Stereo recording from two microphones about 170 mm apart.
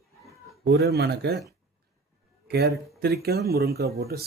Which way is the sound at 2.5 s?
70° right (ahead or behind).